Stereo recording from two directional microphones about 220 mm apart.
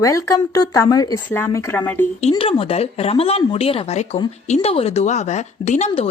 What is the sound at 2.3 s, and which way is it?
Speech, 25° left (ahead or behind).